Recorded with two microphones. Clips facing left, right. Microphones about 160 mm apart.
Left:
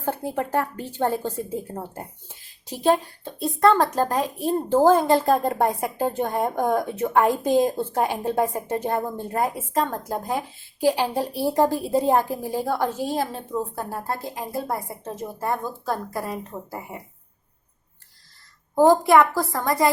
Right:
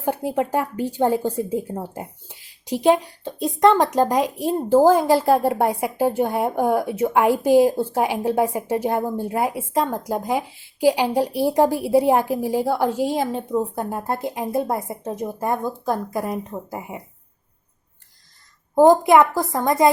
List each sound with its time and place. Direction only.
0.0 s speech: 15° right (ahead or behind)
18.7 s a woman's voice: 20° right (ahead or behind)